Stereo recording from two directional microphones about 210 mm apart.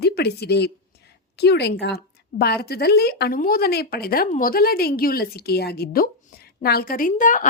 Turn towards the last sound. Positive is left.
turn(degrees=40)  # may be behind; listen again after turning